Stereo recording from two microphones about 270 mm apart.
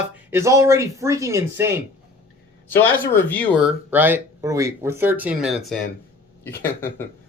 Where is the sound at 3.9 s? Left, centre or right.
Centre.